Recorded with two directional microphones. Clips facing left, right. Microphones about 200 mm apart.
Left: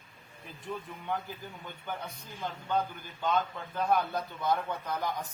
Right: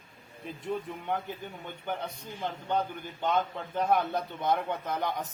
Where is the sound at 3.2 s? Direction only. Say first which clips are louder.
Right 1 dB; 20° right (ahead or behind).